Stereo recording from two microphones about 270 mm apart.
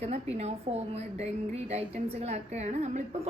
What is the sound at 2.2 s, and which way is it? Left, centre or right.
Speech, right.